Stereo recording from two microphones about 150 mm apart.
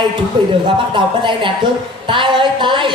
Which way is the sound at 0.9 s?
35° right (ahead or behind).